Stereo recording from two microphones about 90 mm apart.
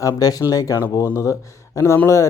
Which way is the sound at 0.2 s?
45° left (ahead or behind).